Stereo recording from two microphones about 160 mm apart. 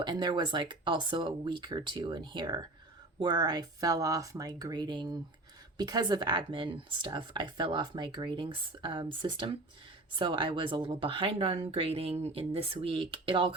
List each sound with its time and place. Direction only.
0.0 s speech: 25° right (ahead or behind)